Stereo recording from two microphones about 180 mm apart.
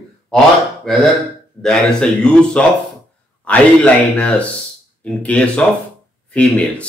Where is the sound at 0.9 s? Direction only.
Centre (ahead or behind).